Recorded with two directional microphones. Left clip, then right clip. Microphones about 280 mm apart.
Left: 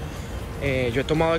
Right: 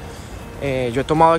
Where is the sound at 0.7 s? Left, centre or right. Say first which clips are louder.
Right 3 dB; centre.